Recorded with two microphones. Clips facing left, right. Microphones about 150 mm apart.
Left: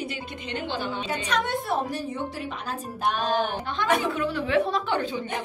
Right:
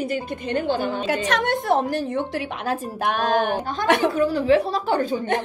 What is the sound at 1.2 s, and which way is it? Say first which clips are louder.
A woman's voice: right 4 dB; 90° right.